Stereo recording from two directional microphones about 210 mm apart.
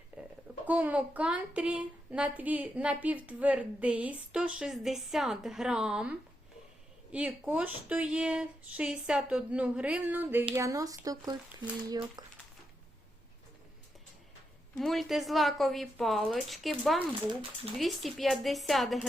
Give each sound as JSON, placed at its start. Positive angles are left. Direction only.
{"t": 0.1, "sound": "a sound", "side_deg": -5}
{"t": 0.7, "sound": "speech", "side_deg": -5}
{"t": 14.8, "sound": "speech", "side_deg": 0}